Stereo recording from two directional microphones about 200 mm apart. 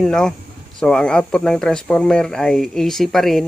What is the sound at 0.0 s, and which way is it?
Speech, 5° left (ahead or behind).